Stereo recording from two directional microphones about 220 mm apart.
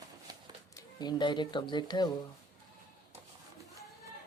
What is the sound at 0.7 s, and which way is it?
Speech, 20° left (ahead or behind).